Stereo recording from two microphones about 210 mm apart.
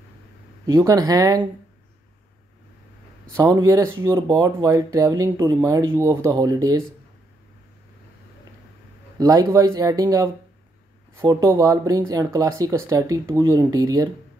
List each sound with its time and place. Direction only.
0.7 s speech: 15° right (ahead or behind)
3.3 s speech: 15° right (ahead or behind)
9.2 s speech: 15° right (ahead or behind)